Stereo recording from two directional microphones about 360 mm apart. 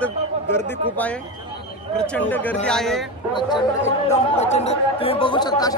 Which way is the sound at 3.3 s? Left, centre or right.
Centre.